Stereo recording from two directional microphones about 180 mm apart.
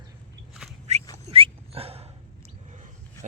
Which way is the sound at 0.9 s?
40° right (ahead or behind).